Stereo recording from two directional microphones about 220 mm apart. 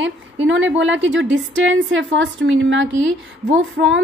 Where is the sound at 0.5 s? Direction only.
55° right (ahead or behind).